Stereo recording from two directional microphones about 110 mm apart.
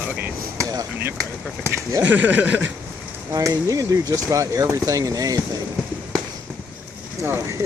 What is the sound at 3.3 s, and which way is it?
Speech, 35° right (ahead or behind).